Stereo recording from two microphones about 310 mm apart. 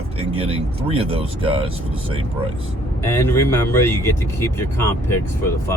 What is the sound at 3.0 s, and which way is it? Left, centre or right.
Speech, centre.